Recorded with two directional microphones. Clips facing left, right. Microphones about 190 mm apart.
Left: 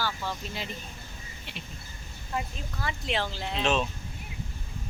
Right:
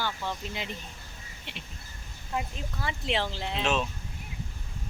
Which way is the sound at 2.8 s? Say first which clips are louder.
Right 1 dB; 25° right (ahead or behind).